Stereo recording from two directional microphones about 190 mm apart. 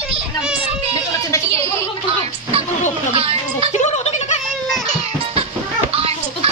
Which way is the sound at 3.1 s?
30° right (ahead or behind).